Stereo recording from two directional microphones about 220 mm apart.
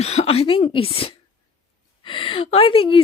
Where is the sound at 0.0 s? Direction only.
30° left (ahead or behind).